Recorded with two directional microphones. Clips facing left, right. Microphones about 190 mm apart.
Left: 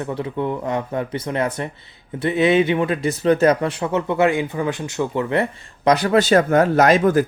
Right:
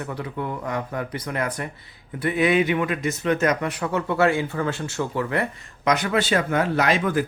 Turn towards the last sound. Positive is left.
turn(degrees=45)  # may be behind; listen again after turning